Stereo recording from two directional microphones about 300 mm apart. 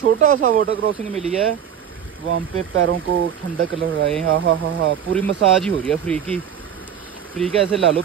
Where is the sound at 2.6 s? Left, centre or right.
Right.